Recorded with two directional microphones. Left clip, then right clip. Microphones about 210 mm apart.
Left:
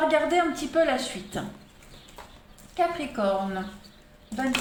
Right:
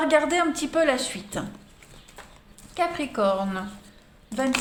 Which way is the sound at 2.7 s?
45° right (ahead or behind).